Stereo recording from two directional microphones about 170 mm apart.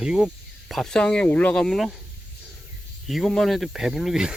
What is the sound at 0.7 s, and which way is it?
Speech, centre (ahead or behind).